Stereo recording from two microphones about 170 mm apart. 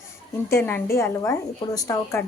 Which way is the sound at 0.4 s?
15° left (ahead or behind).